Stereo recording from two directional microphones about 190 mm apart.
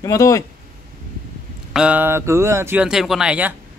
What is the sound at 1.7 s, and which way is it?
Speech, 5° right (ahead or behind).